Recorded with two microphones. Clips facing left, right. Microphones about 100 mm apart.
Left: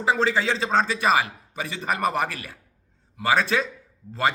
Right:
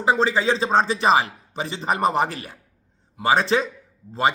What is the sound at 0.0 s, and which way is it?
A man's voice, 20° right (ahead or behind).